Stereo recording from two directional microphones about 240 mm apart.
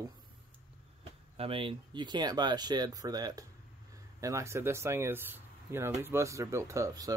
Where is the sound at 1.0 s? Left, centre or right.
Right.